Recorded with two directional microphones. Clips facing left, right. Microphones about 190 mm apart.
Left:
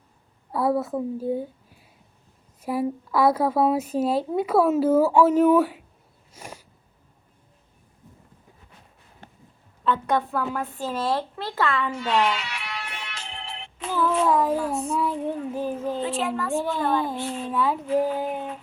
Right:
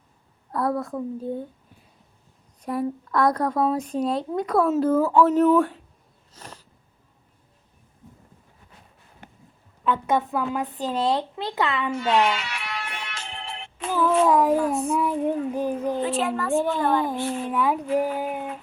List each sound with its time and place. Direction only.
0.5 s a woman's voice: 5° left (ahead or behind)
2.6 s a woman's voice: 5° left (ahead or behind)
6.3 s a sound: 10° left (ahead or behind)
9.8 s speech: 15° right (ahead or behind)
12.3 s music: 50° right (ahead or behind)
14.3 s speech: 15° right (ahead or behind)
16.0 s a woman's voice: 50° right (ahead or behind)
17.5 s speech: 15° right (ahead or behind)